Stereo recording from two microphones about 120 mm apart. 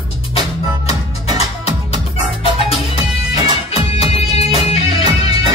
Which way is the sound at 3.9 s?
55° left (ahead or behind).